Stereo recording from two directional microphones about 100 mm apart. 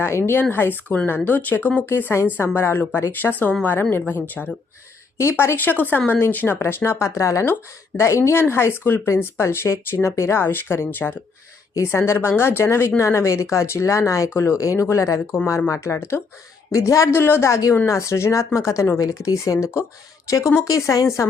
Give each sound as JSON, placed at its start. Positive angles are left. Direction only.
{"t": 0.0, "sound": "speech", "side_deg": 25}
{"t": 20.6, "sound": "speech", "side_deg": 30}